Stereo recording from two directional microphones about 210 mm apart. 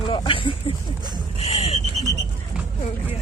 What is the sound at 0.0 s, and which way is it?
Speech, 25° left (ahead or behind).